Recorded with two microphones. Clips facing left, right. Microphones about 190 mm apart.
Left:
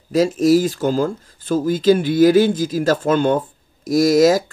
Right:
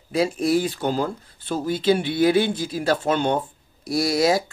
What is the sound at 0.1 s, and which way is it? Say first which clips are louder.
Speech: left 6 dB; 40° left (ahead or behind).